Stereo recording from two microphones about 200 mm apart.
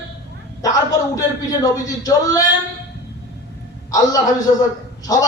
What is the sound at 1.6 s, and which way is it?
Speech, 20° left (ahead or behind).